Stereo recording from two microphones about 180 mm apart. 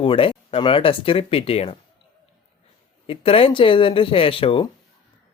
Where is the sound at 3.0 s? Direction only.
30° left (ahead or behind).